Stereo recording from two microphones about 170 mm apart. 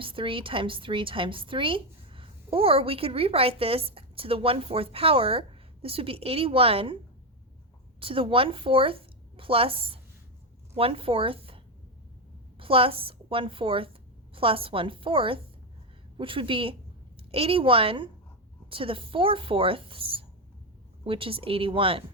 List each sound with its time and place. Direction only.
0.0 s a woman's voice: 30° right (ahead or behind)